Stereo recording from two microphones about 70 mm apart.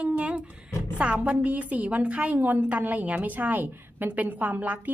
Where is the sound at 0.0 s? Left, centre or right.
Centre.